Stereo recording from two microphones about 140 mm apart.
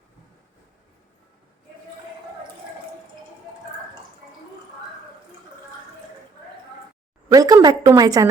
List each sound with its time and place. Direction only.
7.3 s a woman's voice: 25° right (ahead or behind)